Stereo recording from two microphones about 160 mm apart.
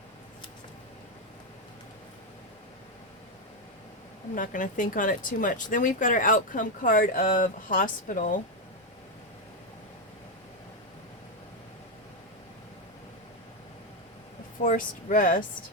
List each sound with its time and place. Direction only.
4.4 s speech: 55° left (ahead or behind)
14.6 s speech: 55° left (ahead or behind)